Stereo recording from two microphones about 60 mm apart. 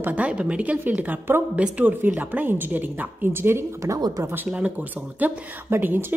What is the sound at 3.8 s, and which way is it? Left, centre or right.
Speech, right.